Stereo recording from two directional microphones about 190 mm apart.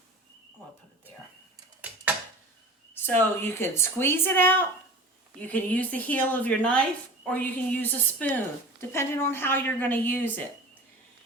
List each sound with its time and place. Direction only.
2.9 s a woman's voice: 10° left (ahead or behind)